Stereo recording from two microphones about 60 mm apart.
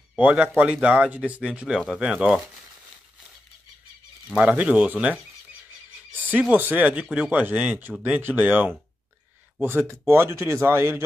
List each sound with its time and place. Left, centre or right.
0.2 s speech: centre
4.4 s speech: right
6.1 s frog: right
6.5 s speech: right
7.0 s speech: centre; by 9.9 s right
10.0 s speech: right